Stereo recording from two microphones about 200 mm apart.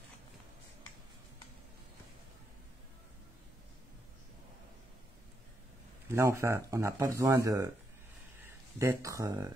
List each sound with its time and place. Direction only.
6.0 s speech: 15° right (ahead or behind)
8.7 s speech: 15° right (ahead or behind)